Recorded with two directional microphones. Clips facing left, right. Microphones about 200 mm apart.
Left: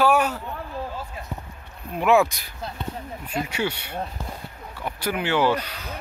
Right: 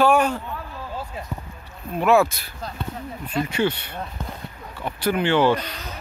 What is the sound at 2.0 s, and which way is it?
Speech, 15° left (ahead or behind).